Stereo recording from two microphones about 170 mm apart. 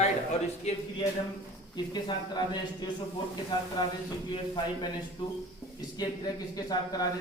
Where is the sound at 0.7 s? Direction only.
40° left (ahead or behind).